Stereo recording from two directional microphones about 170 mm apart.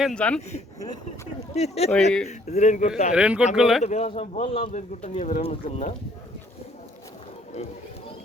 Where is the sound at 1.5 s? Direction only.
40° left (ahead or behind).